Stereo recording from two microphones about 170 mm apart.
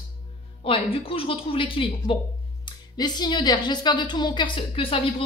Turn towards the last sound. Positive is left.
turn(degrees=30)  # may be behind; listen again after turning